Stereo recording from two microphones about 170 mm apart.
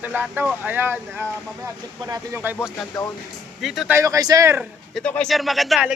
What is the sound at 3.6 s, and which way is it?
Speech, centre (ahead or behind).